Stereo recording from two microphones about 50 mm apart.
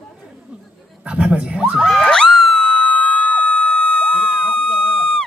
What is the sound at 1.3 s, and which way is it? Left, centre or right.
Children shouting, centre.